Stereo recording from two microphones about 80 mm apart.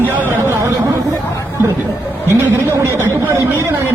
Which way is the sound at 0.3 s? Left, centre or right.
Right.